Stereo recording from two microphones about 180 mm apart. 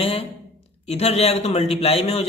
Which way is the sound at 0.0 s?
30° left (ahead or behind).